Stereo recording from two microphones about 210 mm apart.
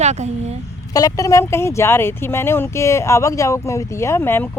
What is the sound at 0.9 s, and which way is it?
Speech, 15° left (ahead or behind).